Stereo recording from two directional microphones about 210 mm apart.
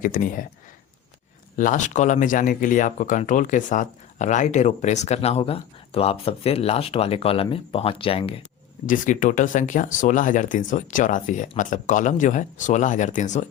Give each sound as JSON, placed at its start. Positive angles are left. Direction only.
{"t": 0.0, "sound": "speech", "side_deg": 40}
{"t": 1.5, "sound": "speech", "side_deg": 35}
{"t": 8.9, "sound": "speech", "side_deg": 40}